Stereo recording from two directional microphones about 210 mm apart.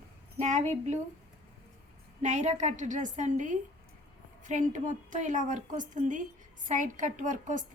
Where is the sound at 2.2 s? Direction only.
35° right (ahead or behind).